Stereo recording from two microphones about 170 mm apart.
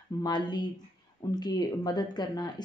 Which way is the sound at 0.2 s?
25° left (ahead or behind).